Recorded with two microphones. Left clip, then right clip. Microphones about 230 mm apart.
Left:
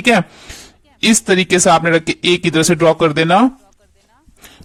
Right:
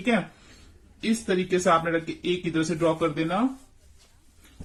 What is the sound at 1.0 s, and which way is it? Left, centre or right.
Speech, left.